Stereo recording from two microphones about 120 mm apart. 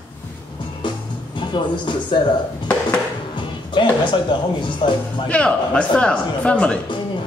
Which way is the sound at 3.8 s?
40° left (ahead or behind).